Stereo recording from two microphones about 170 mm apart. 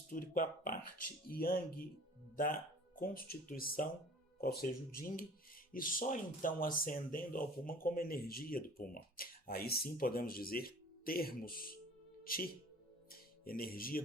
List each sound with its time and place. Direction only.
0.1 s speech: 55° left (ahead or behind)
13.1 s music: 60° left (ahead or behind)